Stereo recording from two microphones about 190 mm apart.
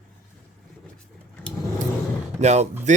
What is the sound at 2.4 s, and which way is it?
Speech, 35° right (ahead or behind).